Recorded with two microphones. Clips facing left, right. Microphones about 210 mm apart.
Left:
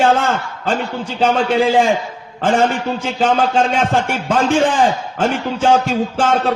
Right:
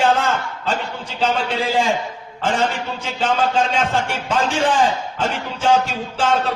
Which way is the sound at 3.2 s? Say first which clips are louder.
Left 3 dB; 55° left (ahead or behind).